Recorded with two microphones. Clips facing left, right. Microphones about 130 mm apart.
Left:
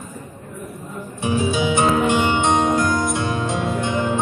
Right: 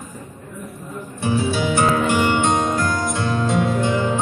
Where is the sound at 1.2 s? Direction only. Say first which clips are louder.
Even; 15° left (ahead or behind).